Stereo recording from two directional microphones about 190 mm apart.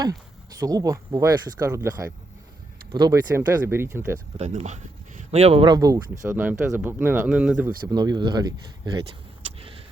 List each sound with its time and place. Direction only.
0.6 s speech: 20° right (ahead or behind)
4.4 s speech: 35° right (ahead or behind); by 7.7 s 5° right (ahead or behind)
7.9 s speech: 20° right (ahead or behind)
9.6 s vehicle: 30° right (ahead or behind)